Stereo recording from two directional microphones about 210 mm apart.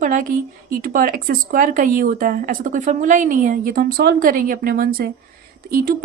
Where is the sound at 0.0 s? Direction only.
40° right (ahead or behind).